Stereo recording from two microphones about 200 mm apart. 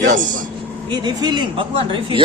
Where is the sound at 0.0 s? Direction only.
40° right (ahead or behind).